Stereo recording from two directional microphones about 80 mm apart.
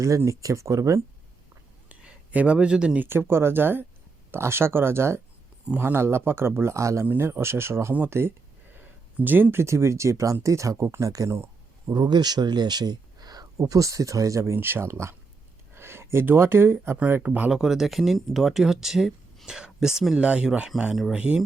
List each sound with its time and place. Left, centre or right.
0.3 s speech: right
1.9 s a sound: centre
3.0 s speech: right
7.1 s speech: right
11.9 s speech: right
17.2 s speech: centre
17.5 s speech: centre